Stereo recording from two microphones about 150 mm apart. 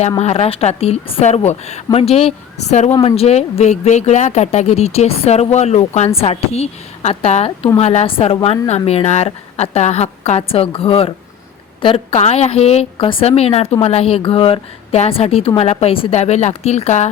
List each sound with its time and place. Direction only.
0.2 s a woman's voice: 45° left (ahead or behind)